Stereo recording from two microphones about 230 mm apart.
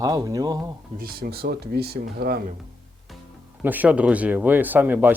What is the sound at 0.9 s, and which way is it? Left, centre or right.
Speech, right.